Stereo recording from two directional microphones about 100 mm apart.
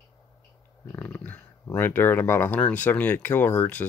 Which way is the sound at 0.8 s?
20° left (ahead or behind).